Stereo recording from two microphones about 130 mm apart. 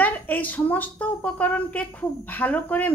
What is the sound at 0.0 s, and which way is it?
A woman's voice, 15° left (ahead or behind).